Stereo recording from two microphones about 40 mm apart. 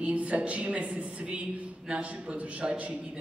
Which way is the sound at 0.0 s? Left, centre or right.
Right.